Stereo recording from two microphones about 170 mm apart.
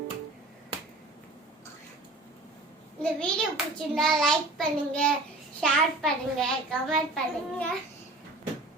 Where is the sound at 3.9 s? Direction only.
Centre (ahead or behind).